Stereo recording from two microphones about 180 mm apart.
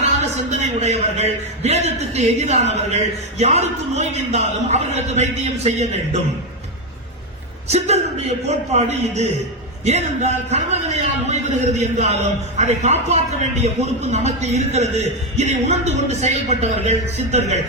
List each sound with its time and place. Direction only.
0.6 s a man's voice: 40° right (ahead or behind)
7.7 s a man's voice: 35° right (ahead or behind)